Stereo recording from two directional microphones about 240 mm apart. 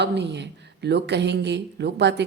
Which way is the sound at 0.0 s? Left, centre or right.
Right.